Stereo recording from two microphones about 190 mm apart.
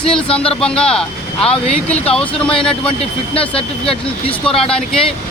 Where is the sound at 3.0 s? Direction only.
30° left (ahead or behind).